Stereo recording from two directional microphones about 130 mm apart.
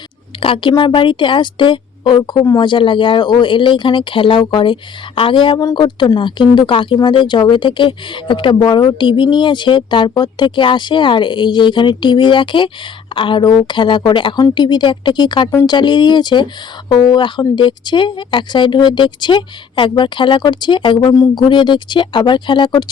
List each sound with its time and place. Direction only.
0.3 s speech: 45° left (ahead or behind)
21.1 s speech: 25° left (ahead or behind)
21.5 s speech: 35° left (ahead or behind)